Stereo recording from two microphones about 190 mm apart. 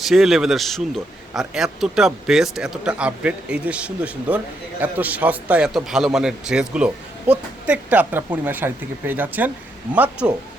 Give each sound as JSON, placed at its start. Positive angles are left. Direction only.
{"t": 0.0, "sound": "a man's voice", "side_deg": 0}